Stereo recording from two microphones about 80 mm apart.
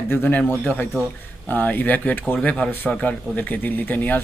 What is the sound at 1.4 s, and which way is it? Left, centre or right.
Speech, left.